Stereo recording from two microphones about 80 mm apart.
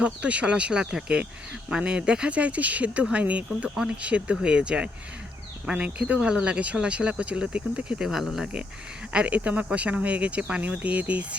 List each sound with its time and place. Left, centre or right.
0.0 s speech: centre
9.1 s speech: centre